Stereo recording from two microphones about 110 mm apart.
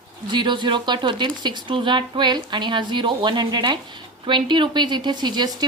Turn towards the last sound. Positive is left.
turn(degrees=-40)  # may be behind; listen again after turning